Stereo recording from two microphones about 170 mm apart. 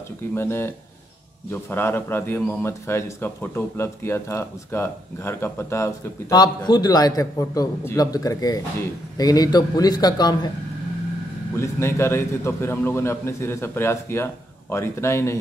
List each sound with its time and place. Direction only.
0.3 s a man's voice: 15° left (ahead or behind)
11.5 s a man's voice: 15° left (ahead or behind)